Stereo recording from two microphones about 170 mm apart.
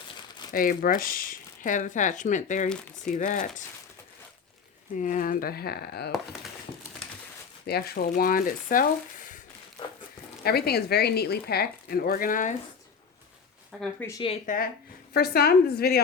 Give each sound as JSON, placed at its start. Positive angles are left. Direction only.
{"t": 0.5, "sound": "speech", "side_deg": 55}
{"t": 4.9, "sound": "speech", "side_deg": 50}
{"t": 7.7, "sound": "speech", "side_deg": 70}
{"t": 8.1, "sound": "speech", "side_deg": 55}
{"t": 10.4, "sound": "speech", "side_deg": 65}
{"t": 13.7, "sound": "a woman's voice", "side_deg": 0}
{"t": 14.4, "sound": "speech", "side_deg": 55}
{"t": 15.1, "sound": "speech", "side_deg": 65}